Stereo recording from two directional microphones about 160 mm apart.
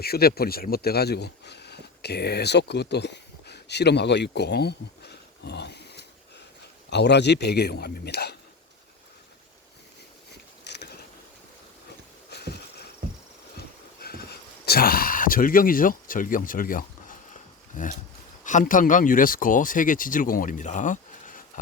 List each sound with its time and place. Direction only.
0.0 s a man's voice: 75° left (ahead or behind)
10.6 s mechanisms: 90° left
12.3 s sniff: 90° left
14.0 s a sound: 80° left; by 17.9 s 55° left (ahead or behind)
18.4 s speech: 55° left (ahead or behind)